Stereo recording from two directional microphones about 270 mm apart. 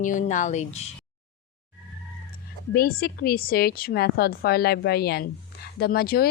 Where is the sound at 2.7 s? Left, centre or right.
Left.